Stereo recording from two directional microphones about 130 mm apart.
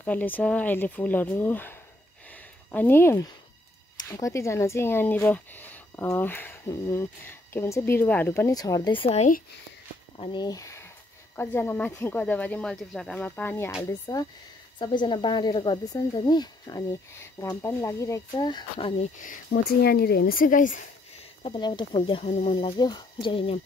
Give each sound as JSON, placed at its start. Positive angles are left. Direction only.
{"t": 0.0, "sound": "speech", "side_deg": 15}
{"t": 2.3, "sound": "a sound", "side_deg": 15}
{"t": 4.1, "sound": "speech", "side_deg": 25}
{"t": 8.9, "sound": "speech", "side_deg": 45}
{"t": 13.8, "sound": "speech", "side_deg": 30}
{"t": 19.1, "sound": "speech", "side_deg": 90}
{"t": 21.5, "sound": "speech", "side_deg": 35}
{"t": 22.3, "sound": "speech", "side_deg": 55}
{"t": 22.8, "sound": "speech", "side_deg": 35}